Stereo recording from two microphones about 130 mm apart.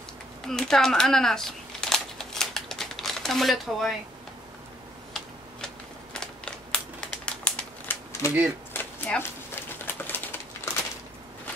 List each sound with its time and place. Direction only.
0.5 s a sound: 5° left (ahead or behind)
6.1 s typewriter: 5° left (ahead or behind)
8.2 s speech: 20° left (ahead or behind)
8.7 s bird: 15° left (ahead or behind)